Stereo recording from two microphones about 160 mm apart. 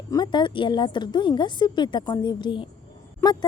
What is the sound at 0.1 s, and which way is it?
Speech, 25° left (ahead or behind).